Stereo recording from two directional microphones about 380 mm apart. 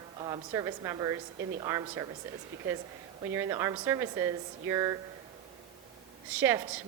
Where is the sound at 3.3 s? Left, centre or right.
Centre.